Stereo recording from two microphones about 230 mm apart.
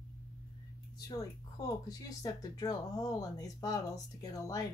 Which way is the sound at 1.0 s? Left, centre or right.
Centre.